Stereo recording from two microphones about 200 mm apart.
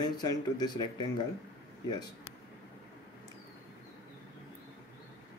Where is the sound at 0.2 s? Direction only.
20° left (ahead or behind).